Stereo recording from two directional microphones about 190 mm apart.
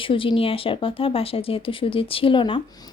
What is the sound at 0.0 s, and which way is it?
Speech, 25° left (ahead or behind).